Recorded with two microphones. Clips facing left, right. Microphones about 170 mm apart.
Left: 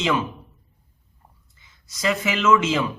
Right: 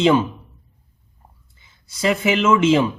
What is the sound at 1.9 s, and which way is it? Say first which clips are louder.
Speech: right 5 dB; 30° right (ahead or behind).